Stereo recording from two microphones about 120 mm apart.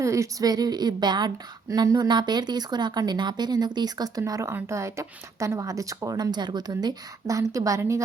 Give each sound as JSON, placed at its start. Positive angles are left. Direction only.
{"t": 0.0, "sound": "a woman's voice", "side_deg": -25}